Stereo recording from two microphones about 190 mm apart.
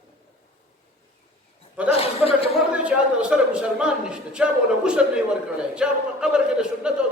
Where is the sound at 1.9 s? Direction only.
30° left (ahead or behind).